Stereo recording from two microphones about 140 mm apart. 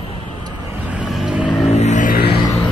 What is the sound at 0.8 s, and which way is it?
Vehicle, 5° right (ahead or behind).